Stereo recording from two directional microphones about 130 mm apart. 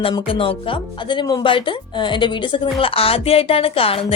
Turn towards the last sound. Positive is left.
turn(degrees=45)  # may be behind; listen again after turning